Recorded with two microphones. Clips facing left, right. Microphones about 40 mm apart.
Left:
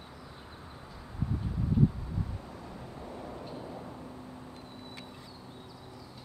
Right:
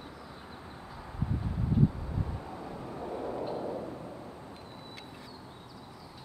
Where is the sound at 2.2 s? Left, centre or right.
Centre.